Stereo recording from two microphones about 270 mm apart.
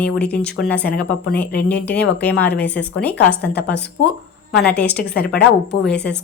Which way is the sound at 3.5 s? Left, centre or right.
Left.